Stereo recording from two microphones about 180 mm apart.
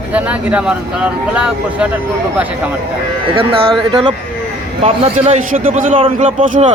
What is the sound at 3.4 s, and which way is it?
Speech, 30° right (ahead or behind).